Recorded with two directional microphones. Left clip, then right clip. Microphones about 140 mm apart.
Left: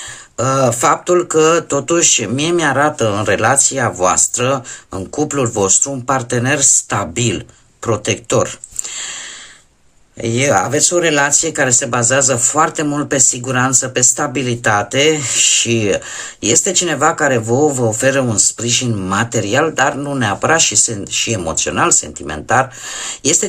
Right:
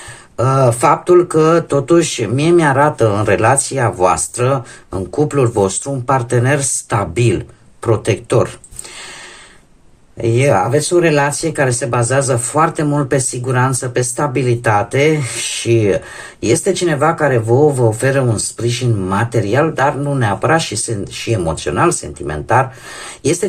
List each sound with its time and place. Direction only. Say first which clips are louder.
0.3 s speech: right 1 dB; 20° left (ahead or behind)
10.2 s speech: right 1 dB; 20° left (ahead or behind)